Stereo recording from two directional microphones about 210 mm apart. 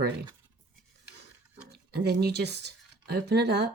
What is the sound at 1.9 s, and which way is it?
Speech, 50° right (ahead or behind).